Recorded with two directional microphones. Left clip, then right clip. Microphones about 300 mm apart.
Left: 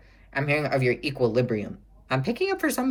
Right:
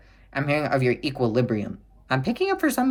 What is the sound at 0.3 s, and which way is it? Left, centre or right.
Speech, centre.